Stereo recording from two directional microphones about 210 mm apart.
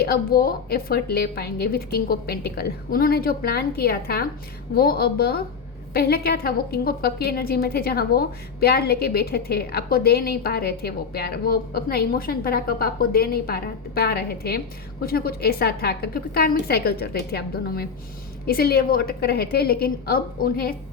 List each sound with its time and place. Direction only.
0.0 s a woman's voice: 45° left (ahead or behind)